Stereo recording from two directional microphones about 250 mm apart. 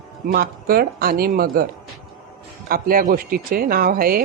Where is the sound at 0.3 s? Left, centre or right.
Right.